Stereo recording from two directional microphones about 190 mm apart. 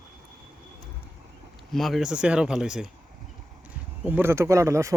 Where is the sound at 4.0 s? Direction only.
10° right (ahead or behind).